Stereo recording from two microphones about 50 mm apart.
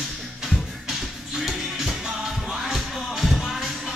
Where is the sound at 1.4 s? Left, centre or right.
Centre.